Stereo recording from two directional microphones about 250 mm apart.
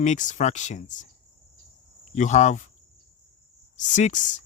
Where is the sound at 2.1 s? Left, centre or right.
Left.